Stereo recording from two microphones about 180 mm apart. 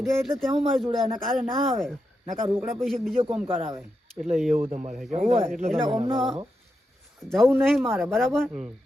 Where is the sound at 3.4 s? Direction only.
30° right (ahead or behind).